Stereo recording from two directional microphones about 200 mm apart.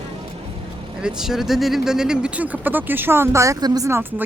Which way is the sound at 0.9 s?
5° right (ahead or behind).